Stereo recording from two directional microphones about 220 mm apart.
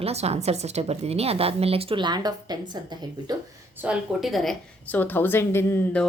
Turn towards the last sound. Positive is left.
turn(degrees=10)  # may be behind; listen again after turning